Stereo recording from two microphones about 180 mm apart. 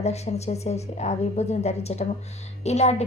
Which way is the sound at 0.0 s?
35° left (ahead or behind).